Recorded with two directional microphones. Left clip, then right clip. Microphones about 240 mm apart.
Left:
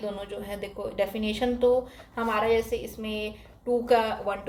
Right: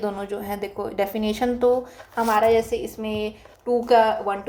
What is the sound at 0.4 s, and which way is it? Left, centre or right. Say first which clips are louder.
A woman's voice: right 5 dB; right.